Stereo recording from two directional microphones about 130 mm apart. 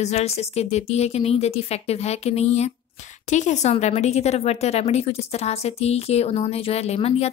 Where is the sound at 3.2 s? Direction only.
70° left (ahead or behind).